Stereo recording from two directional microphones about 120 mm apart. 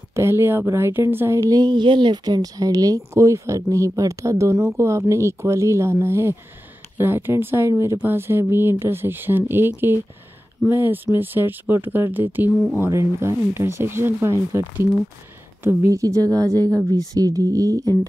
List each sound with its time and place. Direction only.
0.1 s speech: 20° right (ahead or behind)
10.7 s speech: 15° right (ahead or behind)